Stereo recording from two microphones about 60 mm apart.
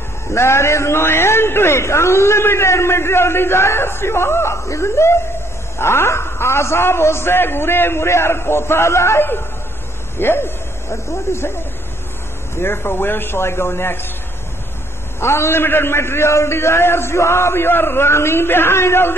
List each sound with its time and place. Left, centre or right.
0.3 s a man's voice: left
10.1 s a sound: left
11.1 s a man's voice: left
12.5 s a man's voice: left
15.1 s a man's voice: left